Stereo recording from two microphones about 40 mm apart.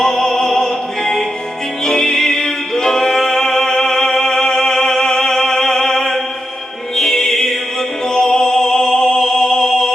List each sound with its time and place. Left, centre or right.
0.0 s opera: centre
1.8 s music: centre